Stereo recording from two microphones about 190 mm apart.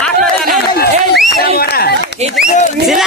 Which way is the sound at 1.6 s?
55° left (ahead or behind).